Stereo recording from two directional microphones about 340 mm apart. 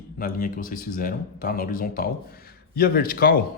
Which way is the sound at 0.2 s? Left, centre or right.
Left.